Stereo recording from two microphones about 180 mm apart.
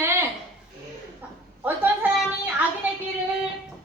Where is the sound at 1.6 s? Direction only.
10° right (ahead or behind).